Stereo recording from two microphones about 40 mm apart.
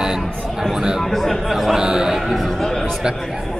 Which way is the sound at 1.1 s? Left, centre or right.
Centre.